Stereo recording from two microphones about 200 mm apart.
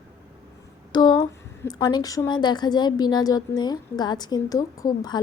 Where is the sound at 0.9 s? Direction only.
20° left (ahead or behind).